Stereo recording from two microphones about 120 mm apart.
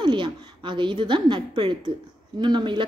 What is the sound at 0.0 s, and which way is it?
A woman's voice, 40° right (ahead or behind).